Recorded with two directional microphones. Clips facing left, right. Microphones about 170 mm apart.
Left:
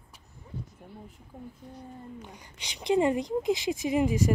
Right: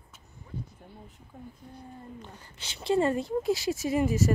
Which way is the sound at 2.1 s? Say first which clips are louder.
Left 1 dB; 15° left (ahead or behind).